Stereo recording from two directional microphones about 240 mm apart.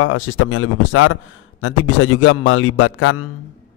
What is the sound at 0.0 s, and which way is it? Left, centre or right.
A man's voice, left.